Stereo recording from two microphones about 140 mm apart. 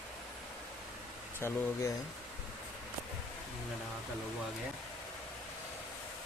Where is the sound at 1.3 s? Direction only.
20° left (ahead or behind).